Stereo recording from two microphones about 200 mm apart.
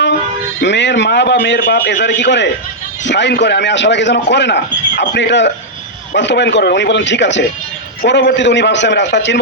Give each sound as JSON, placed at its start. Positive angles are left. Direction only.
{"t": 0.6, "sound": "a man's voice", "side_deg": 60}